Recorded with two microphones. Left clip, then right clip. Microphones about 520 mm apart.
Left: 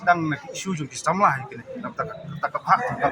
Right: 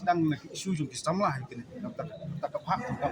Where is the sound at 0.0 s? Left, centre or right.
Right.